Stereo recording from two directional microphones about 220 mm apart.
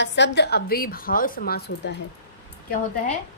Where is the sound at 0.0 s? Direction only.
50° left (ahead or behind).